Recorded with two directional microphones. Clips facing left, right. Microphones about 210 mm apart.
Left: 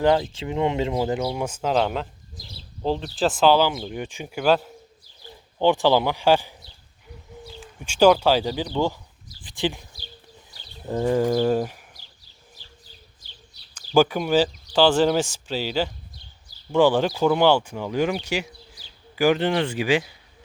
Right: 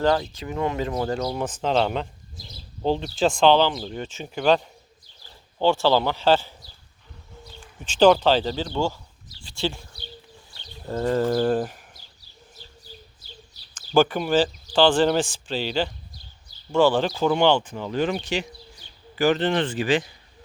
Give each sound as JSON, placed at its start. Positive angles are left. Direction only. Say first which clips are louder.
{"t": 0.2, "sound": "speech", "louder": "left 3 dB", "side_deg": 25}
{"t": 10.8, "sound": "speech", "louder": "left 1 dB", "side_deg": 15}
{"t": 13.9, "sound": "speech", "louder": "left 1 dB", "side_deg": 10}
{"t": 17.1, "sound": "speech", "louder": "left 1 dB", "side_deg": 0}